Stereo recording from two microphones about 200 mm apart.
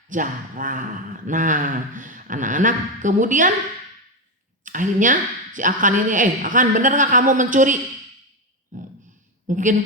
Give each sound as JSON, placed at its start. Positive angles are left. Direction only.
{"t": 0.1, "sound": "speech", "side_deg": -40}
{"t": 4.6, "sound": "speech", "side_deg": -40}
{"t": 8.7, "sound": "a sound", "side_deg": -40}
{"t": 9.5, "sound": "speech", "side_deg": -40}